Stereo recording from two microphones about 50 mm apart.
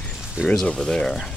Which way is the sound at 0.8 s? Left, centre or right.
Centre.